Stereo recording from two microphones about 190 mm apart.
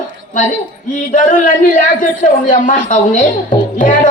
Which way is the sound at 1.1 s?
45° left (ahead or behind).